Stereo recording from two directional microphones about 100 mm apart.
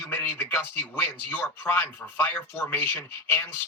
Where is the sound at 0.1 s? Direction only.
15° left (ahead or behind).